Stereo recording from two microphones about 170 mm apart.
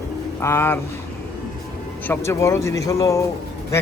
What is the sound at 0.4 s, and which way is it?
Speech, 15° left (ahead or behind).